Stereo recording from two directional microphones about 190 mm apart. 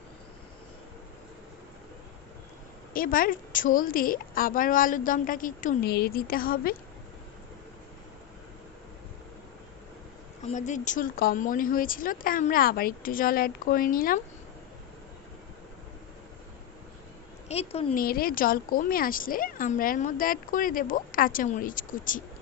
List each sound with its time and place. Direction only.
2.9 s a woman's voice: 50° left (ahead or behind)
10.4 s a woman's voice: 40° left (ahead or behind)
17.5 s a woman's voice: 30° left (ahead or behind)
17.9 s a woman's voice: 50° left (ahead or behind)